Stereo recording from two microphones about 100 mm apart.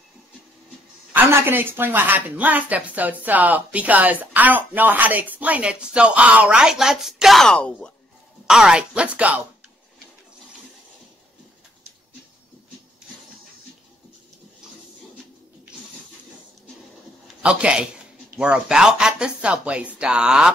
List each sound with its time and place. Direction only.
1.1 s speech: 20° right (ahead or behind); by 7.9 s 10° left (ahead or behind)
8.5 s speech: 5° right (ahead or behind)
17.4 s a man's voice: 10° right (ahead or behind)